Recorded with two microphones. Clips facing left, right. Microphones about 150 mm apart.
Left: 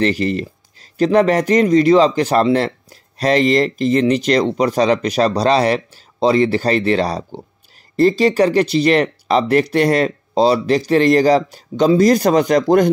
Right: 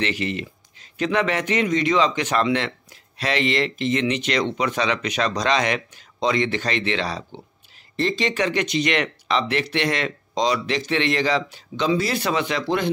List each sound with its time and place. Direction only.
0.0 s speech: 40° left (ahead or behind)